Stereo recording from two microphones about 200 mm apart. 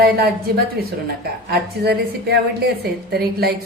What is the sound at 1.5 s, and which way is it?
A woman's voice, 55° right (ahead or behind).